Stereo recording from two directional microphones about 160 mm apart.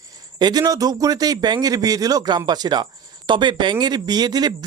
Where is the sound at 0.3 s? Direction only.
25° right (ahead or behind).